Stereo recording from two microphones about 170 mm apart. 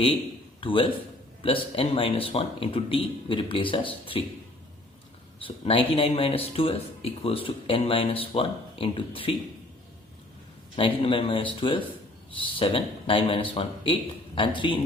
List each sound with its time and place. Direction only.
0.6 s a man's voice: 30° left (ahead or behind)
5.4 s speech: 30° left (ahead or behind)
10.8 s speech: 30° left (ahead or behind)